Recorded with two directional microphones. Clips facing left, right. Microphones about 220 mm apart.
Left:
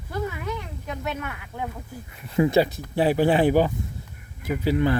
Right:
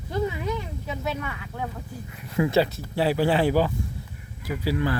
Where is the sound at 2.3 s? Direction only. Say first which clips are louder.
Left 2 dB; 20° left (ahead or behind).